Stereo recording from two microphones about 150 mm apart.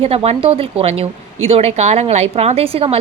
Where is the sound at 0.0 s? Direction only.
40° right (ahead or behind).